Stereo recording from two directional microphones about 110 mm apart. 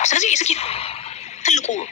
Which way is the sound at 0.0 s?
90° left.